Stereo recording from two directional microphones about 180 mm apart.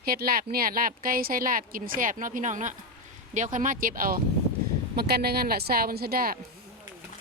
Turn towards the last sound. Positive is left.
turn(degrees=-55)  # may be behind; listen again after turning